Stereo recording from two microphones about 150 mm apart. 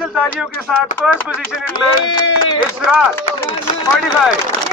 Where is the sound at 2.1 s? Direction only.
30° left (ahead or behind).